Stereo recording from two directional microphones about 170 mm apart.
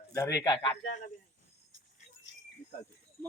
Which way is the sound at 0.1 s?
20° left (ahead or behind).